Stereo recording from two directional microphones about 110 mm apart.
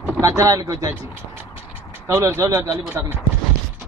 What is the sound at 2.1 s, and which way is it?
Speech, 25° right (ahead or behind).